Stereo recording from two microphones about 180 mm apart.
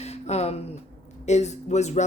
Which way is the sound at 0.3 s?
35° left (ahead or behind).